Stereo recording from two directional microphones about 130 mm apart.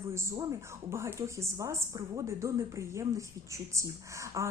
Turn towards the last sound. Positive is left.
turn(degrees=-25)  # may be behind; listen again after turning